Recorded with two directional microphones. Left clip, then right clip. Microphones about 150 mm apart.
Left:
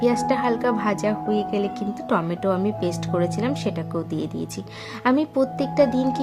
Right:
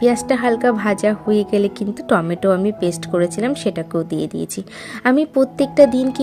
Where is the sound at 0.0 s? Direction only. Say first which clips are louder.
Right 4 dB; 25° right (ahead or behind).